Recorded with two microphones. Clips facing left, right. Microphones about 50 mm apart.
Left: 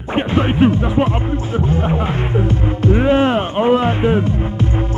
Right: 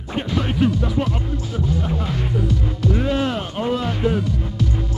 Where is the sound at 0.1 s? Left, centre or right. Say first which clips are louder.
Left 7 dB; left.